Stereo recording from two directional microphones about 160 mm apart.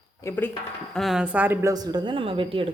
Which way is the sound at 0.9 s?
Centre (ahead or behind).